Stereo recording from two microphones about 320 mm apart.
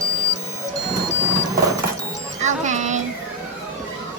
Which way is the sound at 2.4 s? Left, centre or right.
Right.